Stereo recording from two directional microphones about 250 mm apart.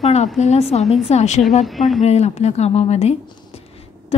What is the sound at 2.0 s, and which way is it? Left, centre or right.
A woman's voice, left.